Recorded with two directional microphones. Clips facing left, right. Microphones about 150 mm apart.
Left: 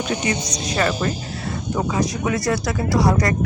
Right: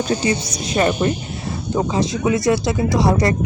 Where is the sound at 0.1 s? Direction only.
30° right (ahead or behind).